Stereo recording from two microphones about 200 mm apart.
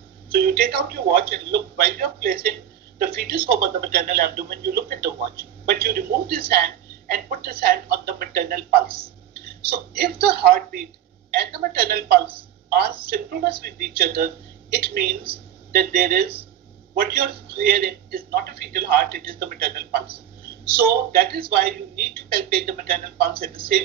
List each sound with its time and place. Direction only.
0.3 s speech: 50° right (ahead or behind)
8.8 s speech: 25° right (ahead or behind)
9.3 s a sound: 50° right (ahead or behind)
10.2 s speech: 50° right (ahead or behind)